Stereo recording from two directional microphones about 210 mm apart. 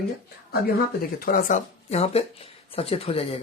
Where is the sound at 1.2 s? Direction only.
40° left (ahead or behind).